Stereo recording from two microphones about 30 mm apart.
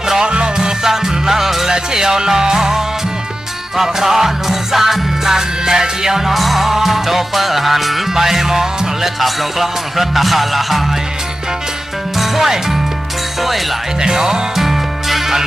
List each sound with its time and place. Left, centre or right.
0.3 s music: right
0.8 s music: centre
6.3 s music: centre
12.1 s music: centre
14.0 s music: centre